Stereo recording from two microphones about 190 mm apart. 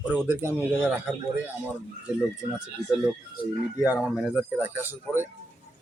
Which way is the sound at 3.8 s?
5° right (ahead or behind).